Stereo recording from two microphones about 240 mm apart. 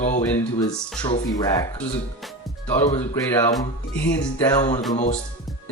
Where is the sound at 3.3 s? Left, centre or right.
Centre.